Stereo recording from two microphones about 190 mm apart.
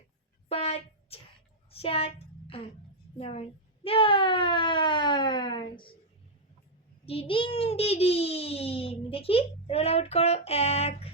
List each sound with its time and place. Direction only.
0.4 s a sound: 30° left (ahead or behind)
1.7 s a child's voice: 30° left (ahead or behind)
7.0 s a child's voice: 30° left (ahead or behind)